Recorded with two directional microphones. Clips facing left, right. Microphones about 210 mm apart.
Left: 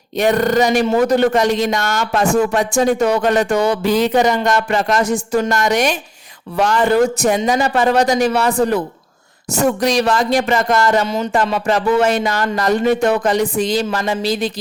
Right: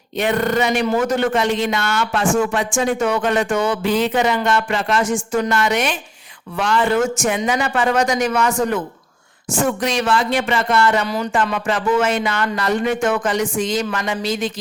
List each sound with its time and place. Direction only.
0.2 s speech: 40° left (ahead or behind)
11.0 s speech: 20° left (ahead or behind)
11.5 s speech: 40° left (ahead or behind)